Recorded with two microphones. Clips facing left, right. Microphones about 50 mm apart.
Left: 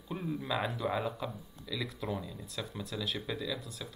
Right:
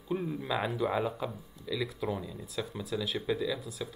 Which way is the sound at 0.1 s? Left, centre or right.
Centre.